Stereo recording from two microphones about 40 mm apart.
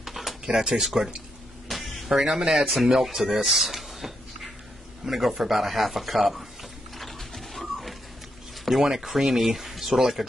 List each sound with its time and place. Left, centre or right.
0.0 s a sound: centre
0.5 s speech: centre
0.8 s speech: centre
1.7 s a sound: centre
2.6 s speech: centre
3.3 s a sound: centre
5.0 s speech: centre
7.0 s bird: centre
8.6 s speech: centre